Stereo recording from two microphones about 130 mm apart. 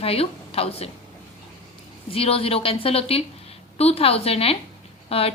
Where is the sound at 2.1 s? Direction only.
50° left (ahead or behind).